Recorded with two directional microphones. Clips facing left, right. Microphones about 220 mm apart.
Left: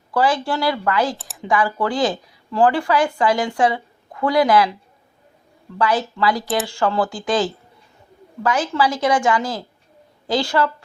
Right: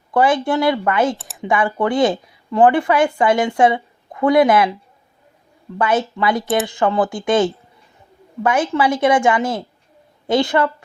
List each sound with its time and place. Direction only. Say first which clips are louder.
0.1 s a woman's voice: right 3 dB; 20° right (ahead or behind)
1.1 s speech: right 4 dB; centre (ahead or behind)
1.5 s a woman's voice: right 2 dB; 25° right (ahead or behind)
5.7 s a woman's voice: right 2 dB; 25° right (ahead or behind)